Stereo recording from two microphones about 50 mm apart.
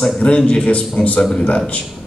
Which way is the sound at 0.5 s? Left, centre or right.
Left.